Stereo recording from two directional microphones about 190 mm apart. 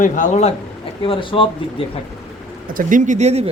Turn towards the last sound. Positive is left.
turn(degrees=-35)  # may be behind; listen again after turning